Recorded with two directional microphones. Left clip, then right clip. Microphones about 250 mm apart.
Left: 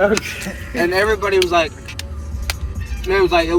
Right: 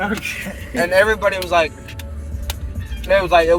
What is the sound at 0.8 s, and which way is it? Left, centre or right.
Speech, right.